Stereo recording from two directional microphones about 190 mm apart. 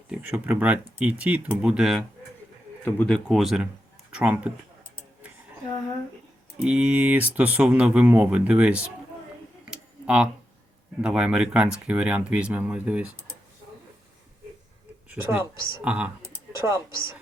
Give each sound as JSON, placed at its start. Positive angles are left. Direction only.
{"t": 0.1, "sound": "speech", "side_deg": -5}
{"t": 2.8, "sound": "speech", "side_deg": 10}
{"t": 3.2, "sound": "speech", "side_deg": 0}
{"t": 6.6, "sound": "speech", "side_deg": -5}
{"t": 9.6, "sound": "a sound", "side_deg": -5}
{"t": 11.0, "sound": "speech", "side_deg": -5}
{"t": 15.1, "sound": "speech", "side_deg": -10}